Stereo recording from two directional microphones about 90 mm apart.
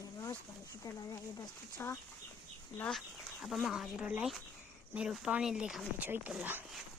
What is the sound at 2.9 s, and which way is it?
Speech, centre (ahead or behind).